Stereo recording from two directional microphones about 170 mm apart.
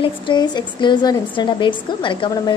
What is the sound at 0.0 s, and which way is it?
A woman's voice, 25° left (ahead or behind).